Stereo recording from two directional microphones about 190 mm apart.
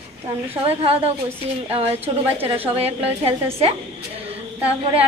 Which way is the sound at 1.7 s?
30° right (ahead or behind).